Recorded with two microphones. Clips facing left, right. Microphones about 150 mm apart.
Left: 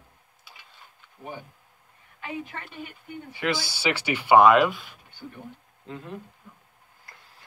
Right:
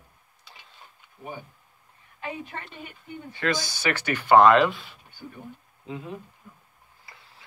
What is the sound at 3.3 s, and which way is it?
Speech, 10° left (ahead or behind).